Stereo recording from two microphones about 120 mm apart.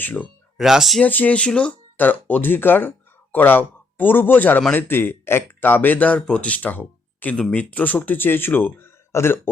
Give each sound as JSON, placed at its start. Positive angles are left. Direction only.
{"t": 0.0, "sound": "speech", "side_deg": 15}
{"t": 0.5, "sound": "speech", "side_deg": -5}
{"t": 1.0, "sound": "speech", "side_deg": 15}